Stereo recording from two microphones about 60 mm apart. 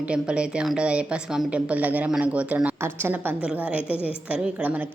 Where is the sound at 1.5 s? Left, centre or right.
Right.